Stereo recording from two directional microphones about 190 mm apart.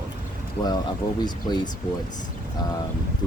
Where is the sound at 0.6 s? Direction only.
20° left (ahead or behind).